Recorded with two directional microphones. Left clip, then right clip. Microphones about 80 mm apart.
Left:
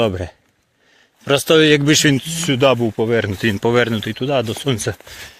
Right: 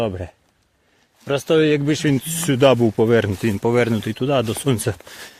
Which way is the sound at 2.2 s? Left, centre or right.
Right.